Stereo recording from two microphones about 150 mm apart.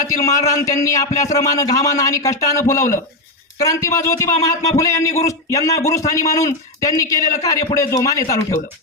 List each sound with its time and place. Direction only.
0.1 s a man's voice: 20° left (ahead or behind)